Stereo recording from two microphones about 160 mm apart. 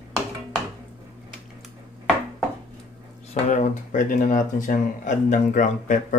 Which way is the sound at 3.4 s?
50° left (ahead or behind).